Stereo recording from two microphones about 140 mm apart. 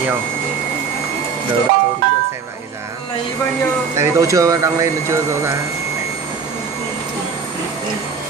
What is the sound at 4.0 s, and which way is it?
Speech, 20° right (ahead or behind).